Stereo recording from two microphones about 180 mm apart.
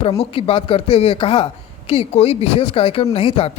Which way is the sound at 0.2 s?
30° left (ahead or behind).